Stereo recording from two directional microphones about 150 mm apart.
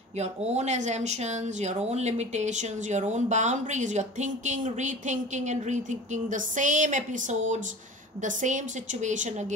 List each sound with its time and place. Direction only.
0.2 s a woman's voice: 50° right (ahead or behind)